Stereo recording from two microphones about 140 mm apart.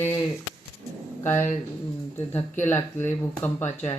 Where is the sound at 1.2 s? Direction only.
20° left (ahead or behind).